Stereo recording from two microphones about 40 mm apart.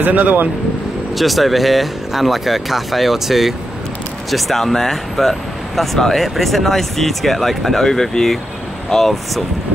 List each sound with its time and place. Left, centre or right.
0.0 s speech: right
1.1 s speech: centre